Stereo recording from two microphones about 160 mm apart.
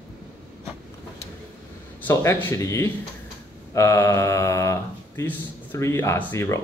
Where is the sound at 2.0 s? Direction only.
15° left (ahead or behind).